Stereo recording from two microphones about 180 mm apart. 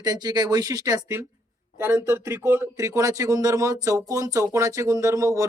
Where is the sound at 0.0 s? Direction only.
20° right (ahead or behind).